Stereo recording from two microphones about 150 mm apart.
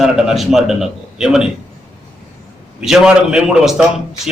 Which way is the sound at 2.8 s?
5° right (ahead or behind).